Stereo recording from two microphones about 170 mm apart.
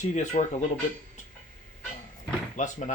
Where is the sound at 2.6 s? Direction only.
45° left (ahead or behind).